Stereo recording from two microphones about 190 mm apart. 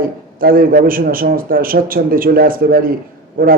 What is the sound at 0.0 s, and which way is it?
Speech, 50° right (ahead or behind).